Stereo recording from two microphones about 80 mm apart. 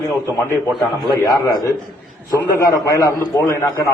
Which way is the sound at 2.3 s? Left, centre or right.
Left.